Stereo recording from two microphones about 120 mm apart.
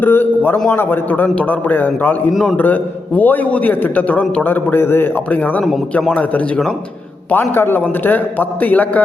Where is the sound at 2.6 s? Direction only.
15° left (ahead or behind).